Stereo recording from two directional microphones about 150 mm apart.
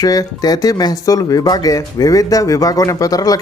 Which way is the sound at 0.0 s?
25° left (ahead or behind).